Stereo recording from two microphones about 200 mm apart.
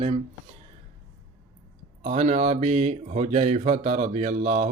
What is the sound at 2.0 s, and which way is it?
Speech, 35° right (ahead or behind).